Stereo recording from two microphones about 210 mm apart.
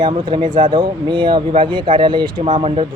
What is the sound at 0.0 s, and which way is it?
Speech, 20° right (ahead or behind).